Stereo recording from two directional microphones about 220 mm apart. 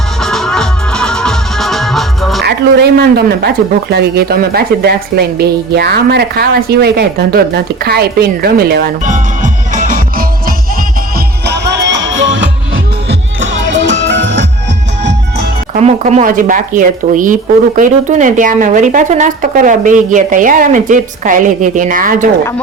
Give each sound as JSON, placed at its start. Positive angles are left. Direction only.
{"t": 0.2, "sound": "music", "side_deg": 0}
{"t": 2.4, "sound": "a woman's voice", "side_deg": -45}
{"t": 11.4, "sound": "music", "side_deg": -55}
{"t": 15.7, "sound": "a woman's voice", "side_deg": -30}